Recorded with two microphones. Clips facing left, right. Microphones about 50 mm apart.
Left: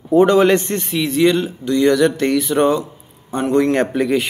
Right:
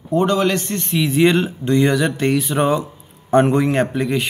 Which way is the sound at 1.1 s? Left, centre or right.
Right.